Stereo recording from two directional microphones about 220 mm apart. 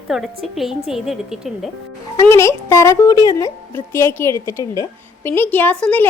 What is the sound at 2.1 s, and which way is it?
A woman's voice, 15° left (ahead or behind).